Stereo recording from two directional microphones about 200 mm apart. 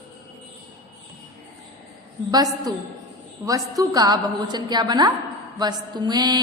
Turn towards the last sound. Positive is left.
turn(degrees=-20)  # may be behind; listen again after turning